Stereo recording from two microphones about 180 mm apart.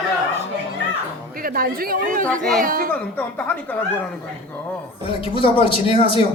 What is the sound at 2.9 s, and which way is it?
Speech, 10° left (ahead or behind).